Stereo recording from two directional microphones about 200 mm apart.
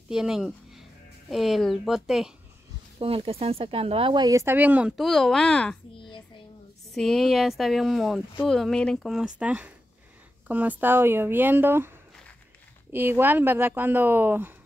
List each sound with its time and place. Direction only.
0.1 s speech: centre (ahead or behind)
3.0 s speech: 30° right (ahead or behind); by 5.8 s 5° left (ahead or behind)
6.9 s speech: centre (ahead or behind)
12.9 s speech: 10° right (ahead or behind)